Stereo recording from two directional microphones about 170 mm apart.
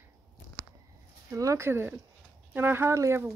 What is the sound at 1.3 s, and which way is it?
Speech, 20° right (ahead or behind).